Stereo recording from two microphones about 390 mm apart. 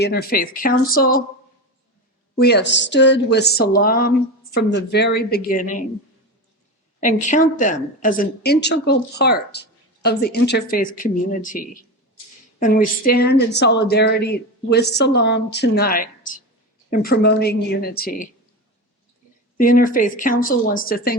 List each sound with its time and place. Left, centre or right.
0.0 s a woman's voice: left
2.3 s a woman's voice: left
7.0 s a woman's voice: centre
19.5 s a woman's voice: left